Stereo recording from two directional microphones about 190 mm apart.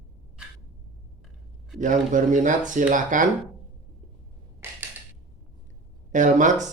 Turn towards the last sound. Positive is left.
turn(degrees=-40)  # may be behind; listen again after turning